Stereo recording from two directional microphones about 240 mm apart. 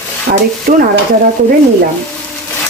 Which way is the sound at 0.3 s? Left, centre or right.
Right.